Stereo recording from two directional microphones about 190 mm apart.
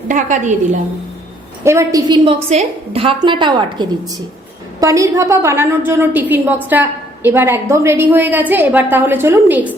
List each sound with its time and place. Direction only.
0.1 s a woman's voice: 40° right (ahead or behind)
1.6 s a woman's voice: 15° right (ahead or behind)